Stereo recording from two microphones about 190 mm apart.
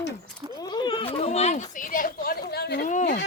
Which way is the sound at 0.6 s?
25° left (ahead or behind).